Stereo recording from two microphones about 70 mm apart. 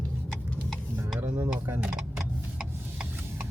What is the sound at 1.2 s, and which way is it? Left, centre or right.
Speech, right.